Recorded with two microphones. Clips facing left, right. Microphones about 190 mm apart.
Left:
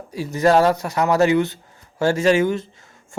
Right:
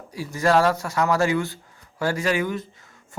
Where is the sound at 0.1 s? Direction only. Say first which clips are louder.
Left 4 dB; 20° left (ahead or behind).